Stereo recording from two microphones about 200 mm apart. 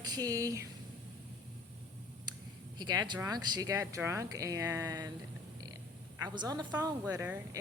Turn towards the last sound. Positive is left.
turn(degrees=-10)  # may be behind; listen again after turning